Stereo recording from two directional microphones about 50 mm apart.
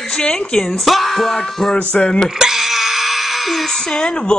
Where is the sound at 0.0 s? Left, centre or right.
Centre.